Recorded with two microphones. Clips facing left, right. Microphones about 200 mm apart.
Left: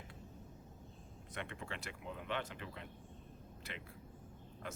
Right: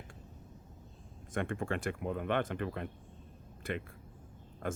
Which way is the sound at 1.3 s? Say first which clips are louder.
Right 11 dB; 50° right (ahead or behind).